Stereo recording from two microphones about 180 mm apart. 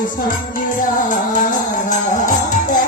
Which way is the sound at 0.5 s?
45° left (ahead or behind).